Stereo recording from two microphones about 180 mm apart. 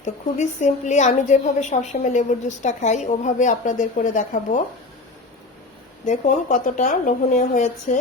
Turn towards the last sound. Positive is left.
turn(degrees=40)  # may be behind; listen again after turning